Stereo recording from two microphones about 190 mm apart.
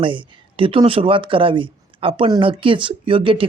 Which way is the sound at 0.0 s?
25° right (ahead or behind).